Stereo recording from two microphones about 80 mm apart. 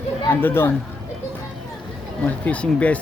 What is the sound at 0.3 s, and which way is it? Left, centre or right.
Speech, left.